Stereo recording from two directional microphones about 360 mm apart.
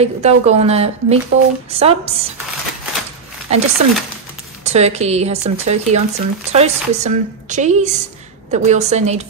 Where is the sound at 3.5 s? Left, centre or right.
Centre.